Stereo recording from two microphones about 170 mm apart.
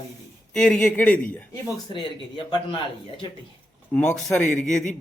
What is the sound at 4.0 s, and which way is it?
Speech, 5° left (ahead or behind).